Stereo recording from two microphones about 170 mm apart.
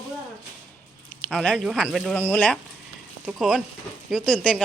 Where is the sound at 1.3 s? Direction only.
5° left (ahead or behind).